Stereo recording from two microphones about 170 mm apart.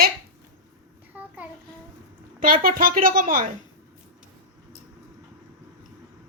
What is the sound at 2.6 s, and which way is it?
Speech, 55° right (ahead or behind).